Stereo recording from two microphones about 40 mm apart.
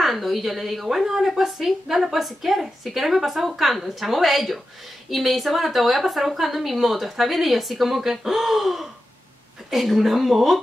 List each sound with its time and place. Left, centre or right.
0.0 s speech: centre